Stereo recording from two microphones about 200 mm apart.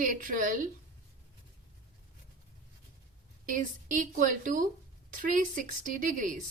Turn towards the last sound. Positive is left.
turn(degrees=-40)  # may be behind; listen again after turning